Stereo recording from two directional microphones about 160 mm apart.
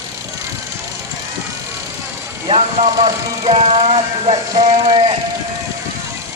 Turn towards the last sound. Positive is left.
turn(degrees=-35)  # may be behind; listen again after turning